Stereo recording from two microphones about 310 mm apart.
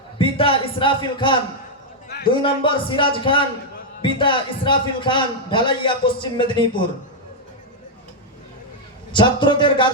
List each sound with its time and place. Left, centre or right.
0.2 s a man's voice: centre
9.1 s a man's voice: centre